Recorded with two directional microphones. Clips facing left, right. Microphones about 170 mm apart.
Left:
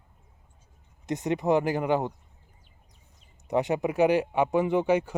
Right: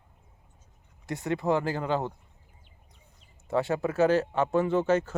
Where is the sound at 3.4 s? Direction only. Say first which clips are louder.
Left 1 dB; 15° left (ahead or behind).